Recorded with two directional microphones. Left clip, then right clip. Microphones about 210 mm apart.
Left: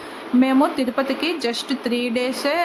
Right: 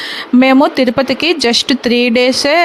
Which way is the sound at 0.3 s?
40° right (ahead or behind).